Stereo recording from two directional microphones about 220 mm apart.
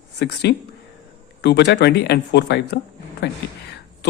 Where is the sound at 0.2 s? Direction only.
50° left (ahead or behind).